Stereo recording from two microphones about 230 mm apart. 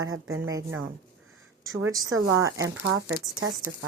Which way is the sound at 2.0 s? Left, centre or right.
Right.